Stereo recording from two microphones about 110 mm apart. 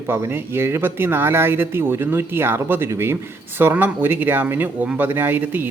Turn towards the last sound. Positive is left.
turn(degrees=-15)  # may be behind; listen again after turning